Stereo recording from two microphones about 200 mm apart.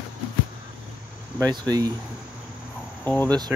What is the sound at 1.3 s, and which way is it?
Speech, 15° right (ahead or behind).